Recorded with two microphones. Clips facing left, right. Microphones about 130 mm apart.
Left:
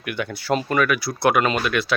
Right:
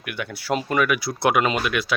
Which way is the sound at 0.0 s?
5° right (ahead or behind).